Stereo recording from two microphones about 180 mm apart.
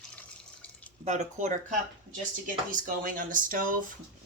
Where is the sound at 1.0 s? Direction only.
40° right (ahead or behind).